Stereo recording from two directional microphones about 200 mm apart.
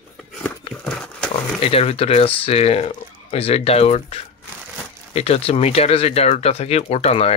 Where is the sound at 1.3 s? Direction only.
30° left (ahead or behind).